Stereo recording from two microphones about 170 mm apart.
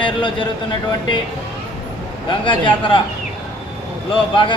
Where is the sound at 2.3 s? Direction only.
30° left (ahead or behind).